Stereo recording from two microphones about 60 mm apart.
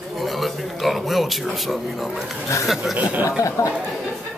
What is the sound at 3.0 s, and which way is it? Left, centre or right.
Speech, right.